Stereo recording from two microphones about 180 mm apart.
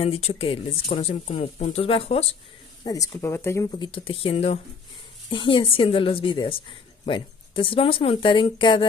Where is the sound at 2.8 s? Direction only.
20° left (ahead or behind).